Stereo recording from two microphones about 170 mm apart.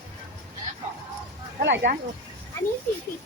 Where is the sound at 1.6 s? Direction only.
90° right.